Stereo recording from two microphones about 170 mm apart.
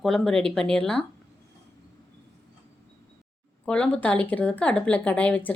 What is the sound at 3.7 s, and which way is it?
A woman's voice, 5° left (ahead or behind).